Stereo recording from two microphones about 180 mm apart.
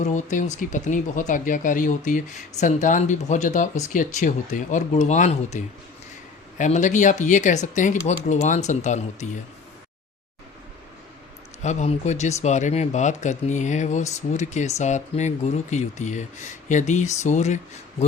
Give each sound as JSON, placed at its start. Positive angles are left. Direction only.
{"t": 0.0, "sound": "speech", "side_deg": 45}
{"t": 11.6, "sound": "speech", "side_deg": 40}